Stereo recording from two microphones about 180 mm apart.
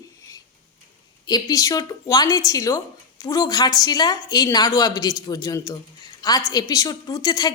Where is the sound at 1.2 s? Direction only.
20° left (ahead or behind).